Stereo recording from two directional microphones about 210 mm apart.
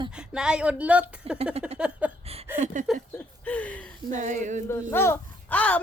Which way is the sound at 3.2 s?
5° left (ahead or behind).